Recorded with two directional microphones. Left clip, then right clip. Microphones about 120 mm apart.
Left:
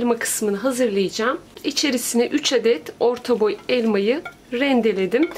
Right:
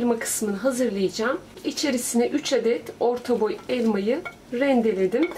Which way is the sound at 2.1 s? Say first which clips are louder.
Left 3 dB; 45° left (ahead or behind).